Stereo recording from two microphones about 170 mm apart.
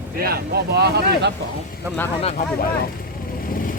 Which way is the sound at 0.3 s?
70° right (ahead or behind).